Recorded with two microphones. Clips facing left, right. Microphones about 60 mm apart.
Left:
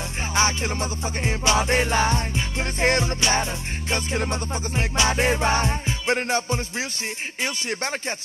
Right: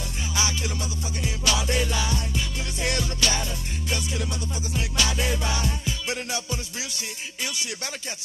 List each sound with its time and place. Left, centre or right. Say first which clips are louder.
0.3 s music: left 6 dB; left
3.9 s music: left 5 dB; left